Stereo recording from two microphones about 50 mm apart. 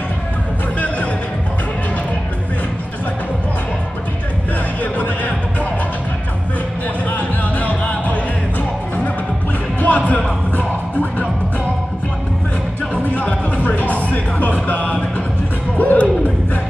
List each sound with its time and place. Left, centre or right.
4.9 s music: left
7.1 s music: left
9.8 s music: left
13.1 s music: left